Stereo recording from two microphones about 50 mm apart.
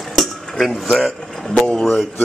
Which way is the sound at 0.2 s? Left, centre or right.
Centre.